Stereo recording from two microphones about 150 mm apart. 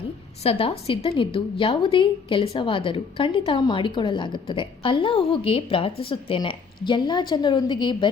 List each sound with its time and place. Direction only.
0.4 s a woman's voice: 40° left (ahead or behind)